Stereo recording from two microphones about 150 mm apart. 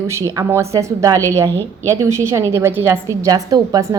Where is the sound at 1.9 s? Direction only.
20° right (ahead or behind).